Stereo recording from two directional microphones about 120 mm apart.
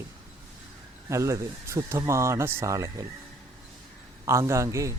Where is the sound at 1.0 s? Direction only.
25° right (ahead or behind).